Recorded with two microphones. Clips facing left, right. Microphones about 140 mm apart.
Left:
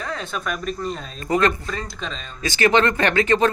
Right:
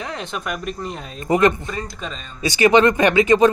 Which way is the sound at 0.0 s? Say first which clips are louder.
Even; 20° right (ahead or behind).